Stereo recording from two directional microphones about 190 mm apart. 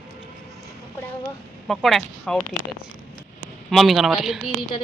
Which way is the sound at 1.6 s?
Centre (ahead or behind).